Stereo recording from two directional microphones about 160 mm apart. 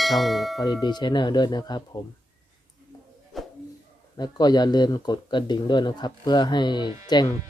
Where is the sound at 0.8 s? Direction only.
25° left (ahead or behind).